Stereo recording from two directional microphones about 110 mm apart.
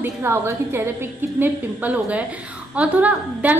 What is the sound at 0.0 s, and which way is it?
A woman's voice, 20° right (ahead or behind).